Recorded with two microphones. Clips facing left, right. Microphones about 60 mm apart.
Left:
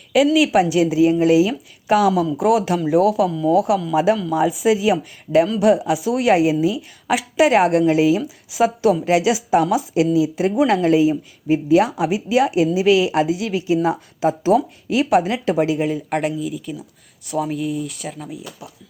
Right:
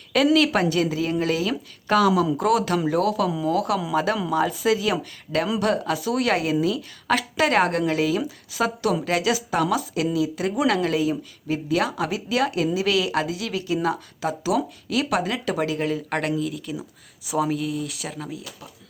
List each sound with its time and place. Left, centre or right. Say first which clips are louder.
0.3 s a woman's voice: left 5 dB; centre